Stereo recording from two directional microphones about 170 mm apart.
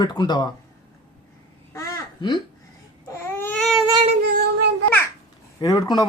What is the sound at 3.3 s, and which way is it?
Baby cry, 15° left (ahead or behind).